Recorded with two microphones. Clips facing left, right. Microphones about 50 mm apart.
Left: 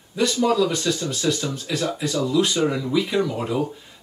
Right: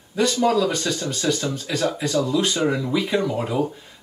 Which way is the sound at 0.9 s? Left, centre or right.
Centre.